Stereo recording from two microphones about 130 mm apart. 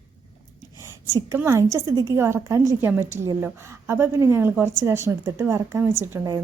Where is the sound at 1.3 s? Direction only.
20° right (ahead or behind).